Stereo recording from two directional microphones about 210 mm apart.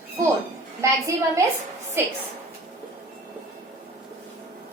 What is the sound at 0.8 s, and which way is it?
Speech, 15° right (ahead or behind).